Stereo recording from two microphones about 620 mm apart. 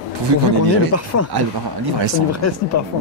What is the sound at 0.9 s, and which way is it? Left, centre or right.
Speech, left.